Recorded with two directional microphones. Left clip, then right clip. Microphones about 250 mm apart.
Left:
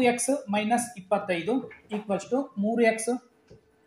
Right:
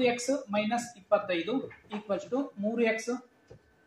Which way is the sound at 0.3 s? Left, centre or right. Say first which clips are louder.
Left 4 dB; left.